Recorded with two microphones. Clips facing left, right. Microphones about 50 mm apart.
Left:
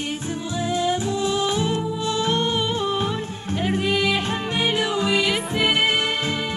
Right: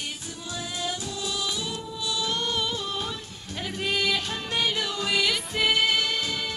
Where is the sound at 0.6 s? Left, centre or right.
Left.